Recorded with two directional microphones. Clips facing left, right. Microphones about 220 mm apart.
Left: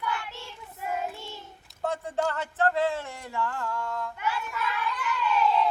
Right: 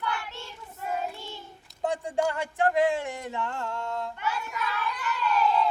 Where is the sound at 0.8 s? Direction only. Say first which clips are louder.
Even; 10° left (ahead or behind).